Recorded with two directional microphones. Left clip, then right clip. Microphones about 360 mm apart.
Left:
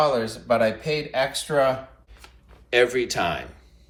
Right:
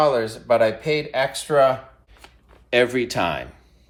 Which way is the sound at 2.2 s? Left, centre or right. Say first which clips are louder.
Right 2 dB; centre.